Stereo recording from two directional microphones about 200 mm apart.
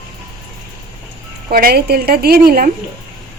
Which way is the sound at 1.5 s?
50° right (ahead or behind).